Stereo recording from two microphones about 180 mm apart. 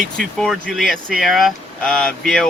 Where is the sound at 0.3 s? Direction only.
Centre (ahead or behind).